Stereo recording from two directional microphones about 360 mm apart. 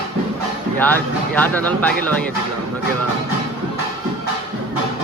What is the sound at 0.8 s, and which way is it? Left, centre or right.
Speech, centre.